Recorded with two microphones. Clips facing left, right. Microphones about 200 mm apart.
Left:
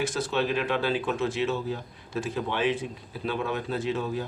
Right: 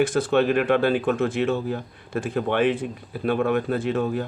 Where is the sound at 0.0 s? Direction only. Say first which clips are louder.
Right 8 dB; 55° right (ahead or behind).